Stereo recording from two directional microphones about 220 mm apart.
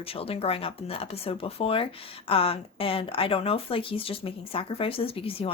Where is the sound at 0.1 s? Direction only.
25° left (ahead or behind).